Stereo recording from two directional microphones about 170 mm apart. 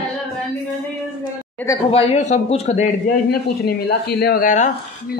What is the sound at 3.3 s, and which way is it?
Speech, 65° left (ahead or behind).